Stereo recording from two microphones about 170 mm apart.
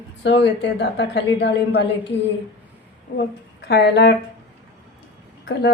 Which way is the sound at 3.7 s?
80° left.